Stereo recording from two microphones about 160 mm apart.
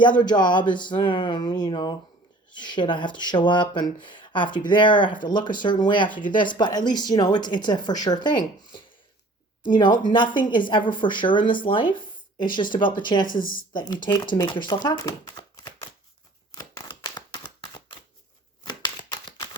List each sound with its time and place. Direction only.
0.2 s speech: 30° left (ahead or behind)
13.2 s speech: 60° left (ahead or behind)
13.7 s speech: 30° left (ahead or behind)
16.5 s a sound: 25° left (ahead or behind)